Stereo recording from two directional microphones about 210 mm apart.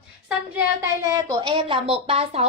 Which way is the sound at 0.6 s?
15° right (ahead or behind).